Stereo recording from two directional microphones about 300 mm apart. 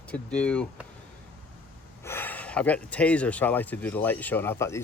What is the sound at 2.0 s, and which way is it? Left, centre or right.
Speech, centre.